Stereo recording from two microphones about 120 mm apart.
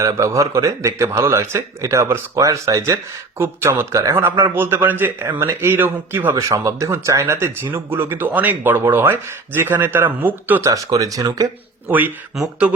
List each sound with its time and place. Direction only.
0.0 s a man's voice: 25° right (ahead or behind)
10.6 s a man's voice: 25° right (ahead or behind)
11.9 s speech: 15° right (ahead or behind)